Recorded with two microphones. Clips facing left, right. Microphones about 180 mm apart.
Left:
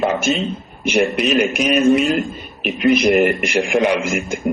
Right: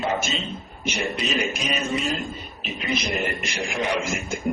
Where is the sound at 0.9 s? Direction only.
65° left (ahead or behind).